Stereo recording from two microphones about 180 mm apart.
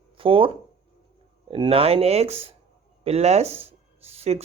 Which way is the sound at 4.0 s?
35° right (ahead or behind).